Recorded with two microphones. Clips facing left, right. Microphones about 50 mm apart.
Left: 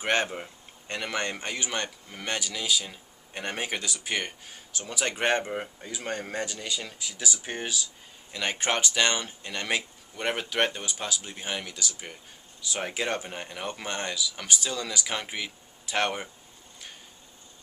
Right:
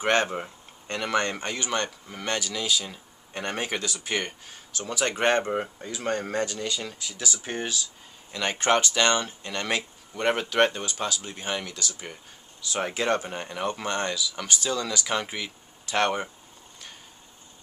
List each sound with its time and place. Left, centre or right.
0.0 s speech: centre
0.3 s speech: centre
0.9 s speech: centre